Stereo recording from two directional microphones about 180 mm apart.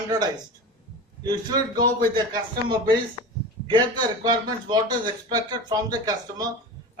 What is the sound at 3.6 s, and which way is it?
A man's voice, 25° right (ahead or behind).